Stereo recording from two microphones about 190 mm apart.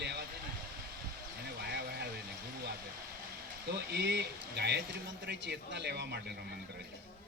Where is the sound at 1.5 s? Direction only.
60° right (ahead or behind).